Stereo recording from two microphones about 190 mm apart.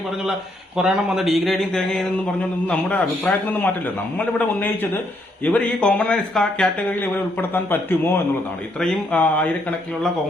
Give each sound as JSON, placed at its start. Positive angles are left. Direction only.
{"t": 0.8, "sound": "speech", "side_deg": -5}